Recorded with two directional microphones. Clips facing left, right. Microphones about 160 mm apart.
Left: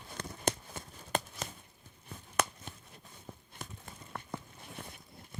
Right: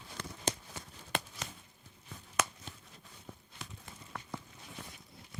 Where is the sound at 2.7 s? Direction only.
50° left (ahead or behind).